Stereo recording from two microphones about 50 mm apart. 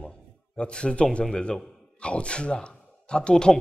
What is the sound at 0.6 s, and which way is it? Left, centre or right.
A man's voice, centre.